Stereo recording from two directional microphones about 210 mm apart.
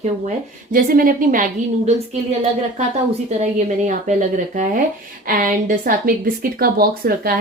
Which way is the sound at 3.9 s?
35° right (ahead or behind).